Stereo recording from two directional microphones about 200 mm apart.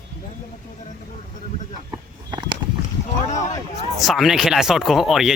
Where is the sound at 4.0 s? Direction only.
Centre (ahead or behind).